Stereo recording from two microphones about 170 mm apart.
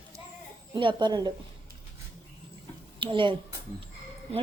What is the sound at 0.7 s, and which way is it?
Speech, 30° right (ahead or behind).